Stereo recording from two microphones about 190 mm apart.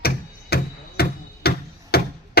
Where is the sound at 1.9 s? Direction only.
55° left (ahead or behind).